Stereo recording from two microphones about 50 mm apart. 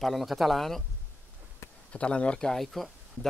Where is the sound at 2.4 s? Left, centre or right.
Centre.